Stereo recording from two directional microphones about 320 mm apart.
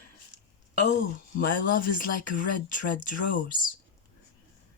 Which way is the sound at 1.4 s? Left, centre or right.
Left.